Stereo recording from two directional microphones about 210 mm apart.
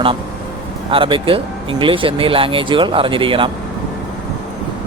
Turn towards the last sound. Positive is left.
turn(degrees=-25)  # may be behind; listen again after turning